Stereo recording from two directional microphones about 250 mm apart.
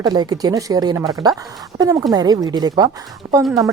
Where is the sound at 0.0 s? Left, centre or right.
Centre.